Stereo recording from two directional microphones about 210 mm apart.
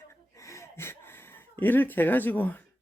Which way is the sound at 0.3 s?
15° left (ahead or behind).